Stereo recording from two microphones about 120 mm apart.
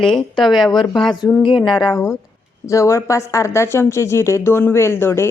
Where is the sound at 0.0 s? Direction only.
5° left (ahead or behind).